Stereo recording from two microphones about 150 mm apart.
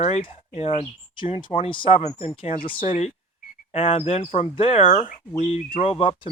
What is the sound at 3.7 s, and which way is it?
Speech, 45° left (ahead or behind).